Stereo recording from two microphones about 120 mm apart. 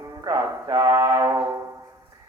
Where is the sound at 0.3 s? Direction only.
25° right (ahead or behind).